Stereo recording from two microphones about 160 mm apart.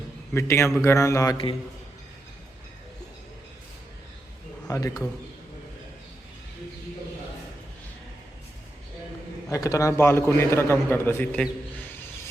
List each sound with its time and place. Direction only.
0.3 s a man's voice: 15° left (ahead or behind)
0.9 s mantra: 20° left (ahead or behind)
4.7 s mantra: 20° left (ahead or behind)
9.5 s a man's voice: 20° left (ahead or behind)